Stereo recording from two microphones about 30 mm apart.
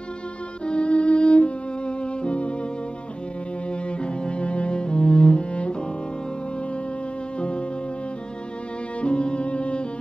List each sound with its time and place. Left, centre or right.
0.7 s music: left
4.0 s cello: left
7.3 s music: left
9.0 s cello: left